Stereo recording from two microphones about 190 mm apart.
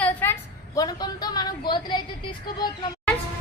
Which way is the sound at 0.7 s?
20° left (ahead or behind).